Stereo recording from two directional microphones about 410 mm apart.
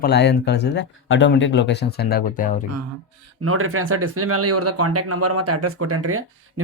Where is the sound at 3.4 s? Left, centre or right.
Right.